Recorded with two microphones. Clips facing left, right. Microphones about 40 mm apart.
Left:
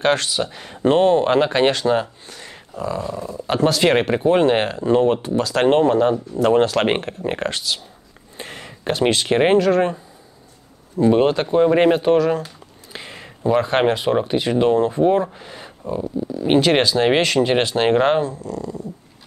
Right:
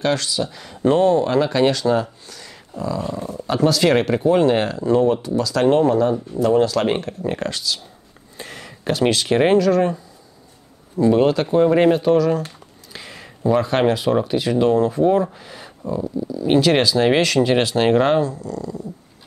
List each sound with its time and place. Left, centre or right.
0.0 s speech: left
3.0 s speech: right
3.3 s speech: left
8.4 s a sound: left
9.6 s speech: left
11.0 s speech: left
12.9 s a sound: centre
13.4 s speech: left
15.9 s speech: left
16.4 s speech: left
18.2 s speech: left